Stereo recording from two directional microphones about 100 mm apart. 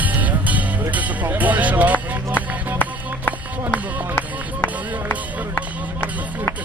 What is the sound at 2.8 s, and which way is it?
Music, 20° left (ahead or behind).